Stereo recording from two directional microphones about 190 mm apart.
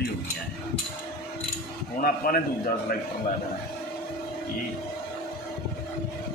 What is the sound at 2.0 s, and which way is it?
Speech, 50° left (ahead or behind).